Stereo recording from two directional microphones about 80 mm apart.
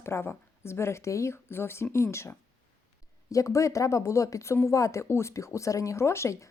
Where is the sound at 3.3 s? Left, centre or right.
Left.